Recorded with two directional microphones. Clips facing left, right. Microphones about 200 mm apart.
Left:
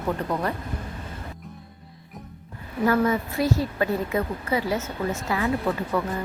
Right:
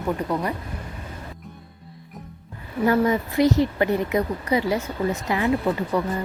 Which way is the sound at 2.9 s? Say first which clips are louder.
Right 2 dB; 20° right (ahead or behind).